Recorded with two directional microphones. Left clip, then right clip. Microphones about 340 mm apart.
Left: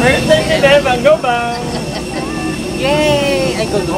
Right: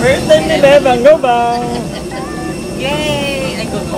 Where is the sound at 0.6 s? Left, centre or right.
Right.